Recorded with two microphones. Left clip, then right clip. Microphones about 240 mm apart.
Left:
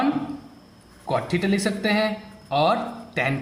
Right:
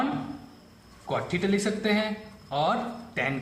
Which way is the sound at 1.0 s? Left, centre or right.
Left.